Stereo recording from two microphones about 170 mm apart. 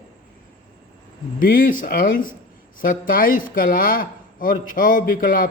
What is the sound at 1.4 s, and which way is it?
Speech, 55° left (ahead or behind).